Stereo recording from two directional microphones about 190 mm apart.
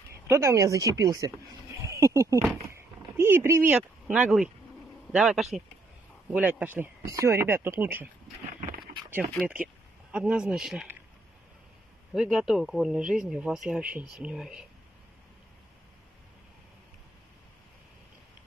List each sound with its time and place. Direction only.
0.3 s speech: 15° right (ahead or behind)
1.8 s a sound: 15° right (ahead or behind)
3.2 s speech: 10° right (ahead or behind)
9.3 s speech: 5° right (ahead or behind)
12.1 s speech: centre (ahead or behind)